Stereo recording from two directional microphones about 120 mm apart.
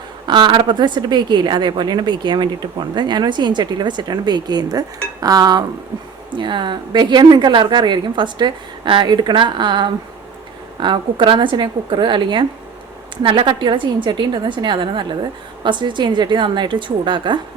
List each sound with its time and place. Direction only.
0.3 s a woman's voice: 40° right (ahead or behind)